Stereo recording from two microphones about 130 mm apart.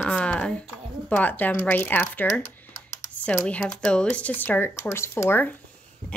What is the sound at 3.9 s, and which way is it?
Speech, 5° left (ahead or behind).